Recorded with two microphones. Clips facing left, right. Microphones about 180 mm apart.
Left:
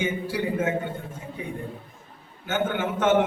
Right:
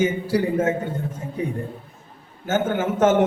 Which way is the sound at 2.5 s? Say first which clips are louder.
Right 4 dB; 40° right (ahead or behind).